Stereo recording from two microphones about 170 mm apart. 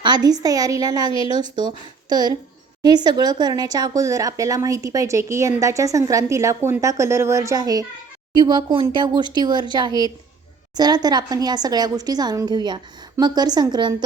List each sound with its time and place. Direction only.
0.0 s a woman's voice: 25° right (ahead or behind)